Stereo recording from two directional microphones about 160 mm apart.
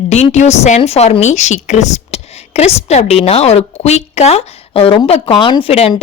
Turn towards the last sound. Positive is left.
turn(degrees=35)  # may be behind; listen again after turning